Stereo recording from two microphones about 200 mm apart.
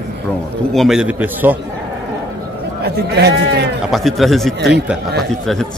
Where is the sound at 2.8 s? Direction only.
55° right (ahead or behind).